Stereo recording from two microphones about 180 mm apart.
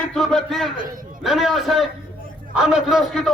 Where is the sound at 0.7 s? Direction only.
50° right (ahead or behind).